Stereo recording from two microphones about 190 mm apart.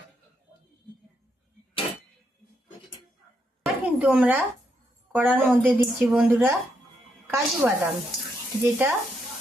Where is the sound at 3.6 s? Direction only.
5° right (ahead or behind).